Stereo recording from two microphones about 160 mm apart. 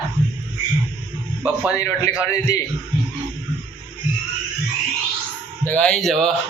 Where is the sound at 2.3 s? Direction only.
20° left (ahead or behind).